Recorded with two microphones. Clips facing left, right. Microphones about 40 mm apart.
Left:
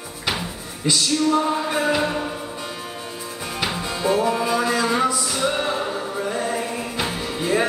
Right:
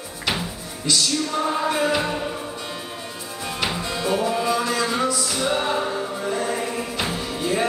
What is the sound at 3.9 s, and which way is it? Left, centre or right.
Music, centre.